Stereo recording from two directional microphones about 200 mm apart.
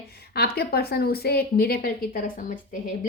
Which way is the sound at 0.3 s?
50° left (ahead or behind).